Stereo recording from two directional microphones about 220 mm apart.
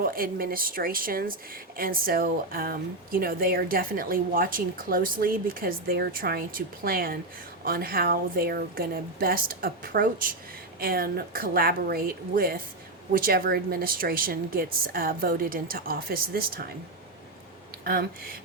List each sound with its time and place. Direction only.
0.0 s speech: 40° right (ahead or behind)
17.8 s speech: 45° right (ahead or behind)